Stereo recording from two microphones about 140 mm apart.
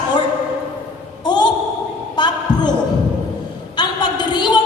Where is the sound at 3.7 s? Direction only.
30° left (ahead or behind).